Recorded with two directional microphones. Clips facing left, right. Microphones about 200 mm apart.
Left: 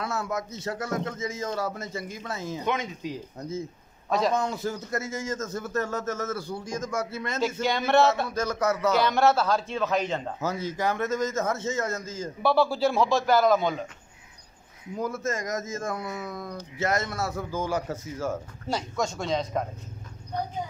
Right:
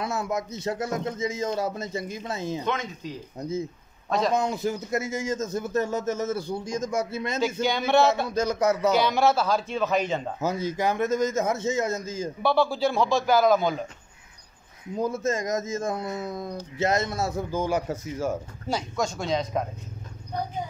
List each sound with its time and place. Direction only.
0.0 s speech: 15° right (ahead or behind)
2.6 s speech: 10° left (ahead or behind)
3.3 s a man's voice: 15° right (ahead or behind)
7.6 s a man's voice: centre (ahead or behind)
8.3 s a man's voice: 15° right (ahead or behind)
8.9 s a man's voice: centre (ahead or behind)
12.4 s a man's voice: 5° left (ahead or behind)
15.0 s speech: 20° right (ahead or behind)
18.7 s a man's voice: centre (ahead or behind)